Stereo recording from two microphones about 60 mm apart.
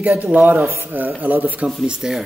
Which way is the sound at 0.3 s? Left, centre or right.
Right.